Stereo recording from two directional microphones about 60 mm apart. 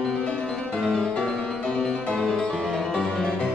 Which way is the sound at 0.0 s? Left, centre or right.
Centre.